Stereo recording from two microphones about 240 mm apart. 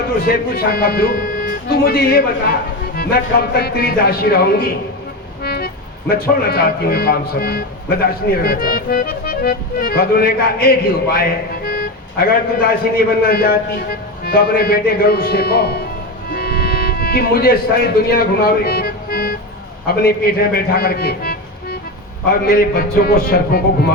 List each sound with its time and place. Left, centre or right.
0.2 s speech: left
16.3 s music: left
20.0 s a man's voice: left